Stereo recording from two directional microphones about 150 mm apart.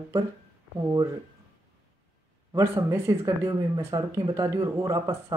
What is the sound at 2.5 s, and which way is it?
Speech, 20° right (ahead or behind).